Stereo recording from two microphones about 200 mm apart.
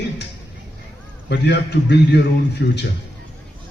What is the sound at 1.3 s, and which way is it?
A man's voice, 55° left (ahead or behind).